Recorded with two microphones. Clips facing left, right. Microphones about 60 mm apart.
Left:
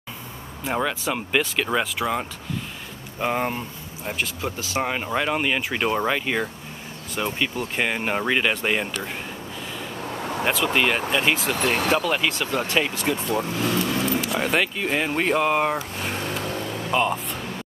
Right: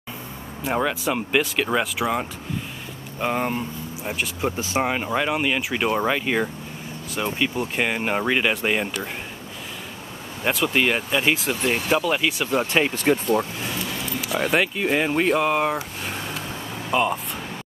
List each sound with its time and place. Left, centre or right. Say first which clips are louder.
0.7 s speech: right 2 dB; centre
4.4 s speech: right 3 dB; right
4.8 s speech: left 1 dB; centre
10.4 s speech: right 1 dB; centre
12.4 s speech: right 2 dB; centre
12.9 s speech: right 4 dB; right
13.6 s keys jangling: left 6 dB; left
14.2 s speech: right 1 dB; centre
16.9 s speech: right 1 dB; centre